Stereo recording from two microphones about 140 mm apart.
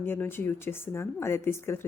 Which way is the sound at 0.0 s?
15° left (ahead or behind).